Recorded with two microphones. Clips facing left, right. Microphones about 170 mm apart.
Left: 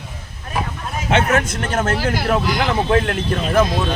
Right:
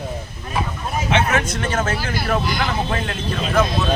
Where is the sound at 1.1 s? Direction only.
55° left (ahead or behind).